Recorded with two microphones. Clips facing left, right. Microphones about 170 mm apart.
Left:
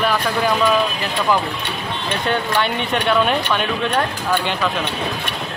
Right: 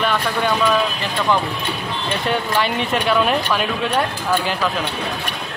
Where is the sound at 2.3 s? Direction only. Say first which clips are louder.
Even; 5° right (ahead or behind).